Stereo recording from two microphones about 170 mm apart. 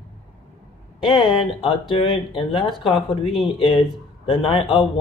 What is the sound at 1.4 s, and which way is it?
A man's voice, 30° left (ahead or behind).